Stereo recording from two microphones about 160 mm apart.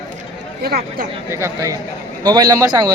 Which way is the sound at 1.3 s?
20° right (ahead or behind).